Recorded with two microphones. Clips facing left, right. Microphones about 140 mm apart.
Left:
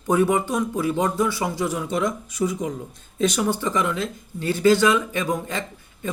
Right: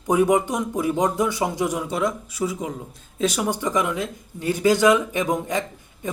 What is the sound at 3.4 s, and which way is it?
Speech, 15° right (ahead or behind).